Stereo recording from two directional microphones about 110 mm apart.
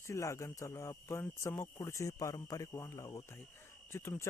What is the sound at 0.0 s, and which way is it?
Speech, 25° left (ahead or behind).